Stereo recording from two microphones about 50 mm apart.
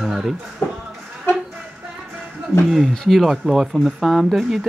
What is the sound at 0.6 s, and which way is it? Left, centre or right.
Speech, left.